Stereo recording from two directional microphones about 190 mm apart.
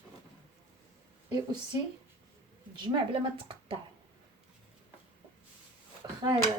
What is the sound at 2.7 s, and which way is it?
Speech, 25° right (ahead or behind).